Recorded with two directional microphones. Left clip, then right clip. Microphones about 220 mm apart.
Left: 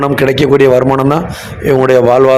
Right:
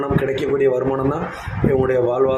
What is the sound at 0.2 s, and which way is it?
A man's voice, 45° left (ahead or behind).